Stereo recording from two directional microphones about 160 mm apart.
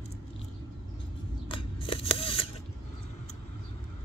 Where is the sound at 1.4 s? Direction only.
30° left (ahead or behind).